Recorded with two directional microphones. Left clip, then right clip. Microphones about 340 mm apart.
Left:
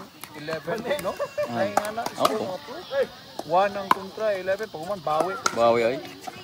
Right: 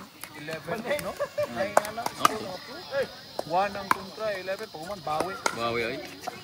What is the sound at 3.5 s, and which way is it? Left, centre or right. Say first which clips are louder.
Speech: left 5 dB; left.